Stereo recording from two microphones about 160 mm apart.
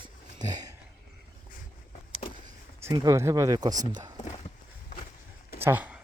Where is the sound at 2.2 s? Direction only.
40° left (ahead or behind).